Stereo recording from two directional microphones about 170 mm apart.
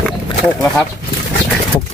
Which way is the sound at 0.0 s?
5° left (ahead or behind).